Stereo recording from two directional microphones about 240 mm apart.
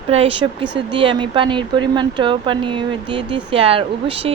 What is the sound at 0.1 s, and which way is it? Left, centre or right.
Speech, right.